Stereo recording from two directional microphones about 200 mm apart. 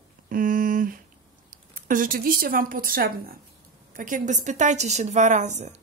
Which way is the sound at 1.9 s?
45° right (ahead or behind).